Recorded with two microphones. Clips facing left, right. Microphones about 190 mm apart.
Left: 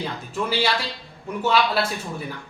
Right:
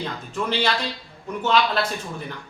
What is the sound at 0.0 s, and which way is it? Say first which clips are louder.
Speech: even; 10° left (ahead or behind).